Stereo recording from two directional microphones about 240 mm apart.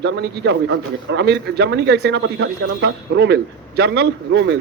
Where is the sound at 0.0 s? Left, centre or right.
Right.